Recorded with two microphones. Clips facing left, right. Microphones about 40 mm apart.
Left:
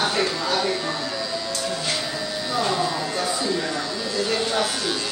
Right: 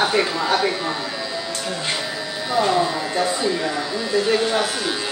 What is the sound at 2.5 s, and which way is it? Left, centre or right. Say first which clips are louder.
A woman's voice: right 5 dB; centre.